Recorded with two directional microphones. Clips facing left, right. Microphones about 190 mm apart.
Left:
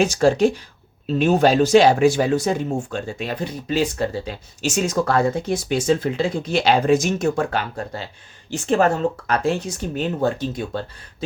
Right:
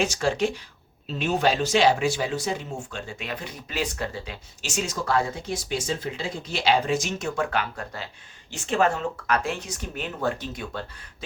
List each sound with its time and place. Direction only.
0.0 s speech: 40° left (ahead or behind)